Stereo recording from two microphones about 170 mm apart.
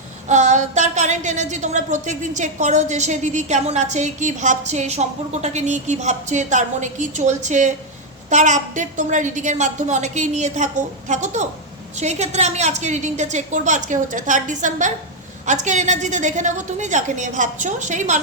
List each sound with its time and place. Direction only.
0.3 s a woman's voice: 45° right (ahead or behind)